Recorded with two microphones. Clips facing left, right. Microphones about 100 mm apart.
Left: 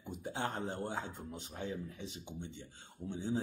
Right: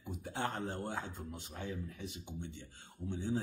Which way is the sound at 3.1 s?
15° left (ahead or behind).